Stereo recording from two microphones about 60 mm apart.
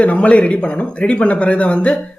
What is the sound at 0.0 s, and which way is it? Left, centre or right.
Speech, left.